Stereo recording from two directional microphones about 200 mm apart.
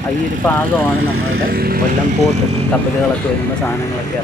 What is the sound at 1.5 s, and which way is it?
Speech, 50° right (ahead or behind).